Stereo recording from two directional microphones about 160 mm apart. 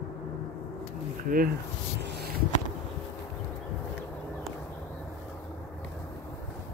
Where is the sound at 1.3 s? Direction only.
65° right (ahead or behind).